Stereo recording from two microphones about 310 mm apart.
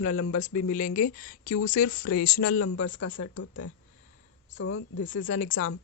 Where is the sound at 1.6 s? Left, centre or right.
Left.